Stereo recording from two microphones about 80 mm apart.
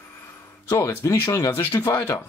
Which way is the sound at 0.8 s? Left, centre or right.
Left.